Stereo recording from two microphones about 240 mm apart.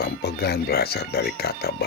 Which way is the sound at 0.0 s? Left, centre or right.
Left.